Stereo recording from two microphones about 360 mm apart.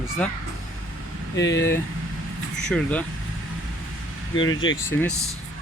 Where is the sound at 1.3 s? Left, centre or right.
Left.